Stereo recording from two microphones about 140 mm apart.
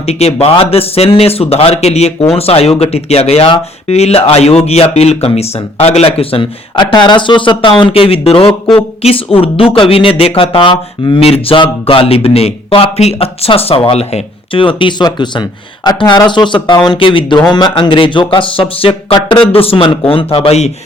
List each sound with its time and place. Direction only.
0.0 s speech: 50° left (ahead or behind)